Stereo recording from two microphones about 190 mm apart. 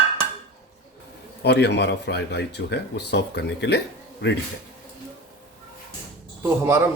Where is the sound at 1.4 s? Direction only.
60° left (ahead or behind).